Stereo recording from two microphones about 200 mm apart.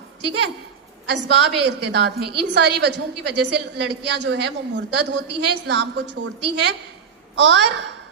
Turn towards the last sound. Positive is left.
turn(degrees=-60)  # may be behind; listen again after turning